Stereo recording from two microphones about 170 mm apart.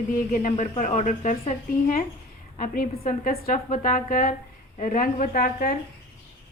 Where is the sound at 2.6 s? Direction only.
60° left (ahead or behind).